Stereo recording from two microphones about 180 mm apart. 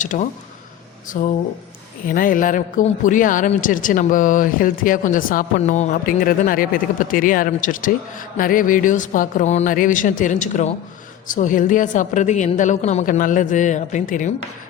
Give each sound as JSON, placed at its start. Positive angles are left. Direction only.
{"t": 0.0, "sound": "a man's voice", "side_deg": 45}